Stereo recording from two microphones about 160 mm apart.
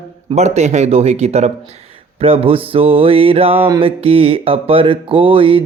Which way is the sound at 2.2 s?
35° right (ahead or behind).